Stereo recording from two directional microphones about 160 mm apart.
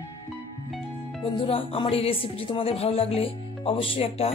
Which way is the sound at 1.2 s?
35° left (ahead or behind).